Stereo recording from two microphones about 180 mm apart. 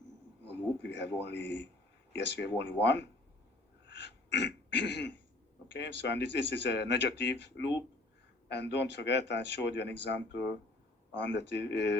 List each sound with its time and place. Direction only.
0.4 s a man's voice: 75° left (ahead or behind)
3.8 s throat clearing: 75° left (ahead or behind)
5.7 s speech: 75° left (ahead or behind)